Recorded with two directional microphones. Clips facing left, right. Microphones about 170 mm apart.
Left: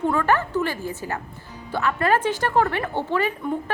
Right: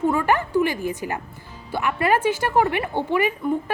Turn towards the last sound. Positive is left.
turn(degrees=-15)  # may be behind; listen again after turning